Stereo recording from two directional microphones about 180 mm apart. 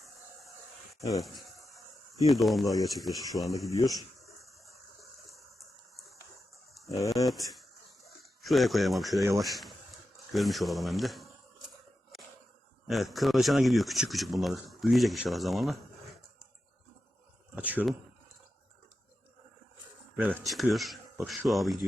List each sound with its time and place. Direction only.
1.2 s a sound: centre (ahead or behind)
2.2 s speech: centre (ahead or behind)
3.7 s speech: 20° left (ahead or behind)
4.4 s water: centre (ahead or behind)
6.8 s speech: 20° left (ahead or behind)
7.3 s speech: centre (ahead or behind)
12.9 s speech: centre (ahead or behind)
17.5 s speech: 10° right (ahead or behind)
20.1 s speech: 10° right (ahead or behind)